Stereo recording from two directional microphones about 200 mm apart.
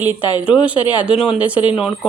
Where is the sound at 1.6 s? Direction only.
25° left (ahead or behind).